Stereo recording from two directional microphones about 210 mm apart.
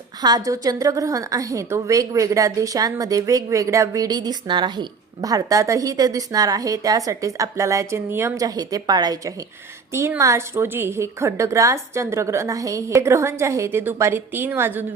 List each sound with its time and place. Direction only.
0.2 s a woman's voice: 20° right (ahead or behind)